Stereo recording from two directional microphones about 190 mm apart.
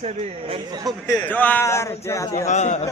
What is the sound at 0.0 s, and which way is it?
Speech, 35° right (ahead or behind).